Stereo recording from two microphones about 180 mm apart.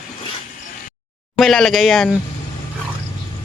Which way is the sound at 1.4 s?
Centre (ahead or behind).